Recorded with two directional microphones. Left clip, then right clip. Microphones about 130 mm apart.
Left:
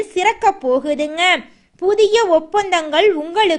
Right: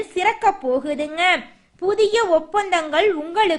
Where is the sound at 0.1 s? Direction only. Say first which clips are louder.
Left 3 dB; 25° left (ahead or behind).